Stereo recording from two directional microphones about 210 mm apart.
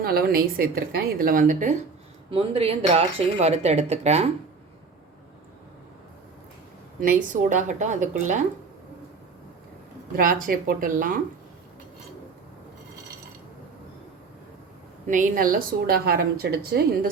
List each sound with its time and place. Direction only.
0.0 s a woman's voice: 45° right (ahead or behind)
2.3 s speech: 25° right (ahead or behind)
7.0 s speech: 40° right (ahead or behind)
10.1 s speech: 45° right (ahead or behind)
15.0 s a woman's voice: 40° right (ahead or behind)